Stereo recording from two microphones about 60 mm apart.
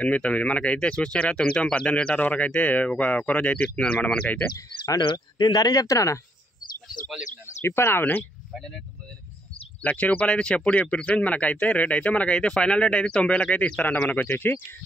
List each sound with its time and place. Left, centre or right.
0.0 s a man's voice: left
4.6 s speech: left
7.6 s speech: left
8.5 s speech: centre
9.8 s a man's voice: left